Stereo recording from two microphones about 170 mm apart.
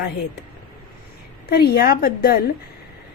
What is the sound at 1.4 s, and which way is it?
Speech, 65° left (ahead or behind).